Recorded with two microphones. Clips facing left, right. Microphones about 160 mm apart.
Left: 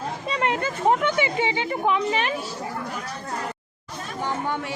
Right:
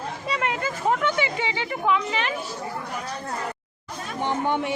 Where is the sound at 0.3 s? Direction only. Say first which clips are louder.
Left 2 dB; 30° left (ahead or behind).